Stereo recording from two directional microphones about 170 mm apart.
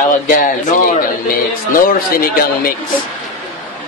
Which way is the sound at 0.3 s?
55° left (ahead or behind).